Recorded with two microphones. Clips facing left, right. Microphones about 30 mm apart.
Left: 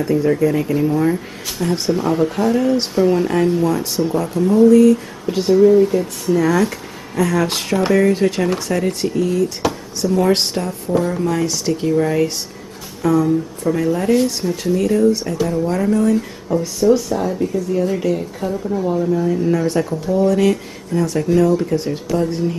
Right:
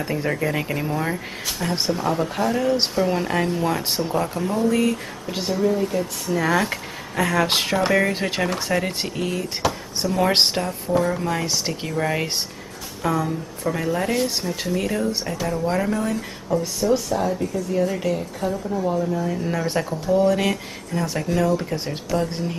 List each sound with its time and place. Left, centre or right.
0.0 s speech: right
0.8 s a woman's voice: centre
4.2 s speech: right
5.5 s a woman's voice: centre
6.4 s speech: centre
6.7 s speech: right
9.6 s a sound: centre
10.1 s speech: right
10.6 s a woman's voice: centre
16.4 s a woman's voice: centre
19.2 s a woman's voice: centre
21.7 s speech: centre
22.1 s speech: centre